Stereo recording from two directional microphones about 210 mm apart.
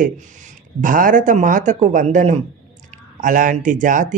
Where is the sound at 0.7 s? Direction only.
40° right (ahead or behind).